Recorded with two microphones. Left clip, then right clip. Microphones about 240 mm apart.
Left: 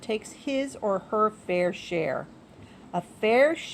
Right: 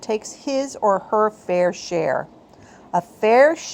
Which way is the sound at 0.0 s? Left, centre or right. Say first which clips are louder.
Right 6 dB; right.